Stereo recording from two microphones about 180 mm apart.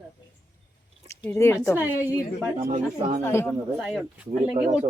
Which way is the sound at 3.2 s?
15° left (ahead or behind).